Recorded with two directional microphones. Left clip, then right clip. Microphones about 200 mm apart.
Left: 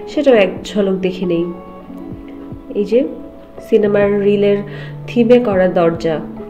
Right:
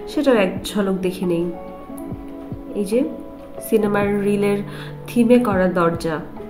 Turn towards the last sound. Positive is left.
turn(degrees=0)  # may be behind; listen again after turning